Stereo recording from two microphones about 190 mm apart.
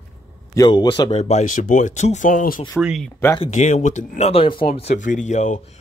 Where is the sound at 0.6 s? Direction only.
25° left (ahead or behind); by 2.6 s 45° left (ahead or behind).